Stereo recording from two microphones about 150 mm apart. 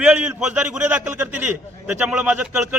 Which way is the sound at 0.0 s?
5° right (ahead or behind).